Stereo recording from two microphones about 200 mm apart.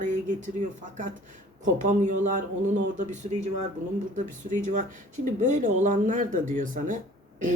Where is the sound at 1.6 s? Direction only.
40° right (ahead or behind).